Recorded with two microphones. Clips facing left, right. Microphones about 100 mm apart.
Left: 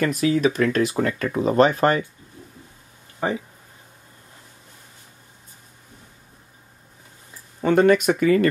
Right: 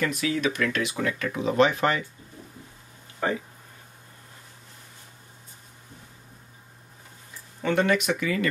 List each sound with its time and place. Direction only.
0.0 s speech: 40° left (ahead or behind)
3.2 s speech: 20° left (ahead or behind)
7.6 s speech: 45° left (ahead or behind)